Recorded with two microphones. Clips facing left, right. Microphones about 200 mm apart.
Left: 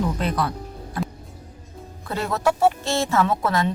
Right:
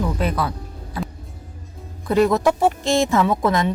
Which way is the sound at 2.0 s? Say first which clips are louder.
Right 7 dB; 15° right (ahead or behind).